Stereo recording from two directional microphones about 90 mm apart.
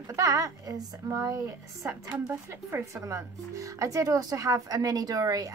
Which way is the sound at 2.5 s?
30° right (ahead or behind).